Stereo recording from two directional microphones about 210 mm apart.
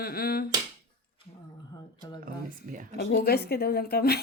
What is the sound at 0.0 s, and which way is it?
Speech, 45° left (ahead or behind).